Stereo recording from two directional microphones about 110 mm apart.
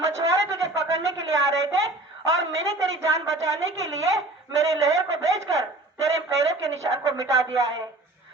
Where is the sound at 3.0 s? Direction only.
30° right (ahead or behind).